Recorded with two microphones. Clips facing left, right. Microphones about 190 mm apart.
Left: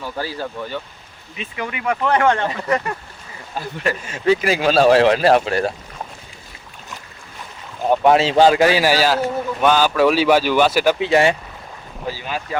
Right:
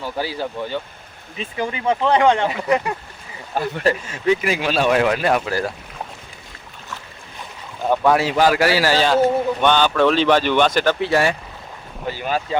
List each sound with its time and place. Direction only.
0.0 s speech: 15° right (ahead or behind)
1.4 s speech: 30° right (ahead or behind); by 2.9 s 15° right (ahead or behind)
3.6 s speech: 50° right (ahead or behind)
4.1 s speech: 35° left (ahead or behind)
7.9 s a man's voice: 20° left (ahead or behind); by 10.9 s 5° left (ahead or behind)
11.0 s speech: 20° left (ahead or behind)
12.1 s speech: 50° right (ahead or behind)